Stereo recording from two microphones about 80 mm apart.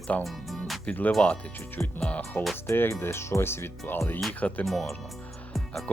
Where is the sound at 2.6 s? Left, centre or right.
Left.